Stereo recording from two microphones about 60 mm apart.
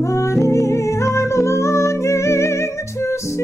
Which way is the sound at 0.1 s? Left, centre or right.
Left.